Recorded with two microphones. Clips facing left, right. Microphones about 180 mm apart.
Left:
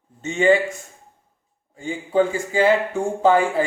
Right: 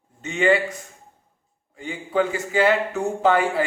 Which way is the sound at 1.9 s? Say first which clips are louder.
Left 3 dB; 30° left (ahead or behind).